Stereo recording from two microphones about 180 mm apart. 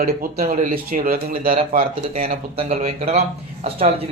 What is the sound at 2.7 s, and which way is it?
Speech, 40° right (ahead or behind).